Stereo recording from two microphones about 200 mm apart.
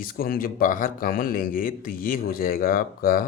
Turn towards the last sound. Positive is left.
turn(degrees=45)  # may be behind; listen again after turning